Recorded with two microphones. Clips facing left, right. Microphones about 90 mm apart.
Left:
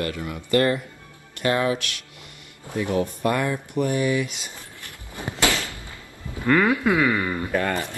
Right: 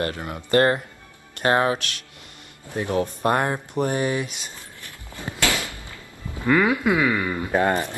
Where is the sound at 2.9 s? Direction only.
25° right (ahead or behind).